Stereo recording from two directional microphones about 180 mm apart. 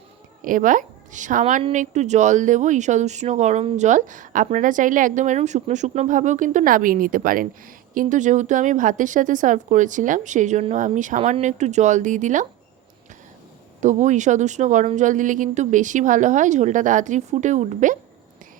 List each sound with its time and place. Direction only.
0.4 s a woman's voice: 45° right (ahead or behind)
13.8 s speech: 40° right (ahead or behind)